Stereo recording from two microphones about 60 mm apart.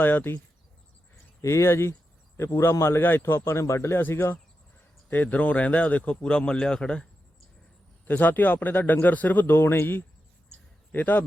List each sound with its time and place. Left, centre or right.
0.0 s speech: left
1.4 s a man's voice: left
5.0 s speech: left
8.0 s speech: left